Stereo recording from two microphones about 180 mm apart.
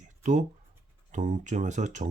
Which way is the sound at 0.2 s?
40° right (ahead or behind).